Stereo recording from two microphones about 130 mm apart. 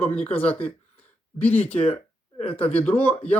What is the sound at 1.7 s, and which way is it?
Speech, 50° left (ahead or behind).